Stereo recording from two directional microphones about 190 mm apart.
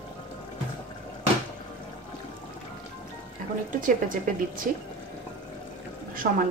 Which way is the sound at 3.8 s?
45° right (ahead or behind).